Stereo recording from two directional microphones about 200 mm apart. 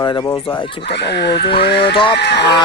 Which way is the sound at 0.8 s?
55° left (ahead or behind).